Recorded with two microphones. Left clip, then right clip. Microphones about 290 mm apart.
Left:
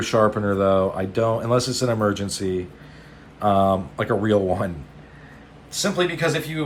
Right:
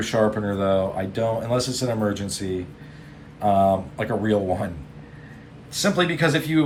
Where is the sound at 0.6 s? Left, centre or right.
Left.